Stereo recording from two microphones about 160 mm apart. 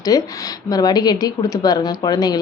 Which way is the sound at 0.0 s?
25° left (ahead or behind).